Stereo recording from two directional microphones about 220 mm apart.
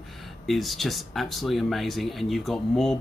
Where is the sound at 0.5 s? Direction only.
Centre (ahead or behind).